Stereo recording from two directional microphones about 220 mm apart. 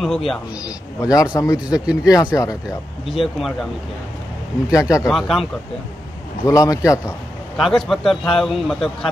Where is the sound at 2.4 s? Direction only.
15° left (ahead or behind).